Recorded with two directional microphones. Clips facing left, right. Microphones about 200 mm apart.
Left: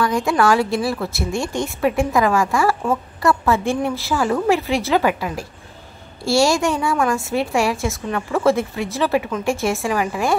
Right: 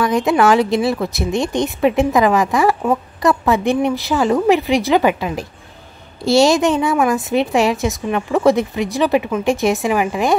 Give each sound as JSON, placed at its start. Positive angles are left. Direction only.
{"t": 0.0, "sound": "a woman's voice", "side_deg": -20}